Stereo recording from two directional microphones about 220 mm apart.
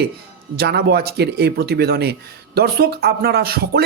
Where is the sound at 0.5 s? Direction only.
45° right (ahead or behind).